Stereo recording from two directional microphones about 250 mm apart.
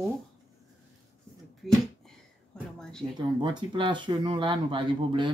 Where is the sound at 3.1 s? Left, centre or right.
Centre.